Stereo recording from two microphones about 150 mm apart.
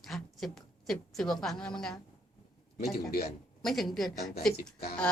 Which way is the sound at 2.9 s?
90° left.